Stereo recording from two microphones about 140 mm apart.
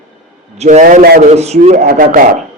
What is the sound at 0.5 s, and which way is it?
Speech, 55° right (ahead or behind).